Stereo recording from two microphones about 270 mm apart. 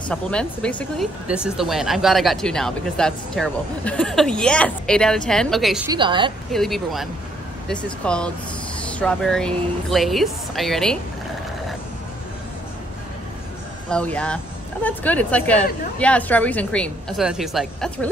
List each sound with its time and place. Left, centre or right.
0.1 s speech: centre
5.9 s a woman's voice: centre
6.5 s speech: centre
13.8 s speech: centre